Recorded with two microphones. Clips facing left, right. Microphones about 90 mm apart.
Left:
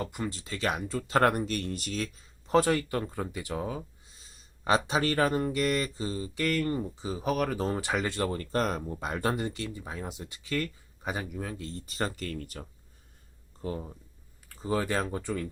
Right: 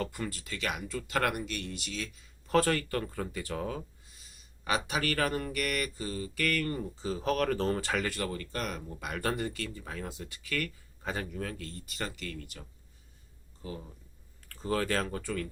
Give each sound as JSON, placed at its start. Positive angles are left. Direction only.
{"t": 0.0, "sound": "speech", "side_deg": 20}
{"t": 2.5, "sound": "speech", "side_deg": 20}
{"t": 4.2, "sound": "speech", "side_deg": 30}
{"t": 14.4, "sound": "speech", "side_deg": 15}